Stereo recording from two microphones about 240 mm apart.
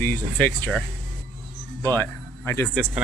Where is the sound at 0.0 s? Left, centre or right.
Centre.